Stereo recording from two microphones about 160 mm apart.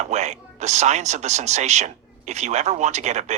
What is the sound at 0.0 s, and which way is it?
Speech, 45° right (ahead or behind).